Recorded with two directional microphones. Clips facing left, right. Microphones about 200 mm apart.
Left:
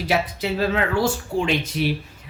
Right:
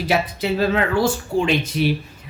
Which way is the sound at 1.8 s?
30° right (ahead or behind).